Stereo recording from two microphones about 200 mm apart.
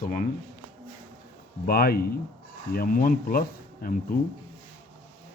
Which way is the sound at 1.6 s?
45° left (ahead or behind).